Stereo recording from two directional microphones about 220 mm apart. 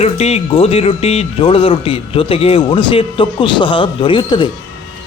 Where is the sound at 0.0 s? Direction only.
30° left (ahead or behind).